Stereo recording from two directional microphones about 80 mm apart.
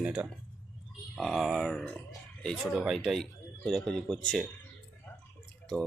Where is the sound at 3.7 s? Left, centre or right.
Centre.